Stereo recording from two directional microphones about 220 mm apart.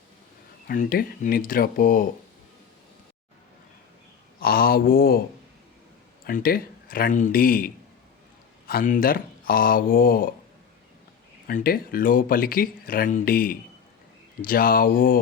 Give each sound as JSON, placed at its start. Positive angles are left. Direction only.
{"t": 0.7, "sound": "speech", "side_deg": 40}
{"t": 4.4, "sound": "a sound", "side_deg": 40}
{"t": 6.2, "sound": "speech", "side_deg": 40}
{"t": 11.4, "sound": "speech", "side_deg": 40}